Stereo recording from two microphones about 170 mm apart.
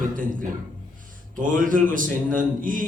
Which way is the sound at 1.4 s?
50° right (ahead or behind).